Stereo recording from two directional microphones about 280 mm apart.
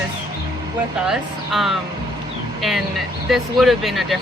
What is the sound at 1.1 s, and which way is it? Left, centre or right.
Speech, centre.